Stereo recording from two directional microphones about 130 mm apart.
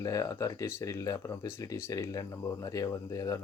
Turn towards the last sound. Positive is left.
turn(degrees=25)  # may be behind; listen again after turning